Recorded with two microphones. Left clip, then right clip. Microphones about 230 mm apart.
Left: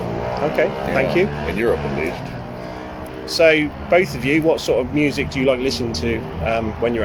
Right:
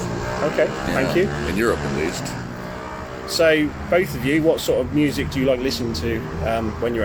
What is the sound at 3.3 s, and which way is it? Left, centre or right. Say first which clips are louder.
Speech: left 3 dB; left.